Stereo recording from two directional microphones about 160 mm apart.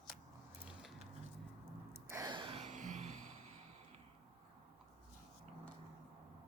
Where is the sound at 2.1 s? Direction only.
25° right (ahead or behind); by 4.0 s 40° right (ahead or behind).